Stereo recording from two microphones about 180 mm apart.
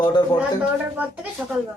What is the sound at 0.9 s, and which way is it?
Speech, 10° right (ahead or behind).